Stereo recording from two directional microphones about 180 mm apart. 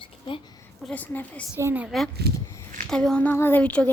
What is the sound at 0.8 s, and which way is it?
Speech, 10° left (ahead or behind).